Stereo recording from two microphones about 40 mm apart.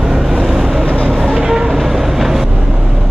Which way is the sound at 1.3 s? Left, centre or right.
Centre.